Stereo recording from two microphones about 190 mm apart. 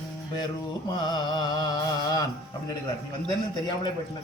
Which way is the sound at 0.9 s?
20° left (ahead or behind).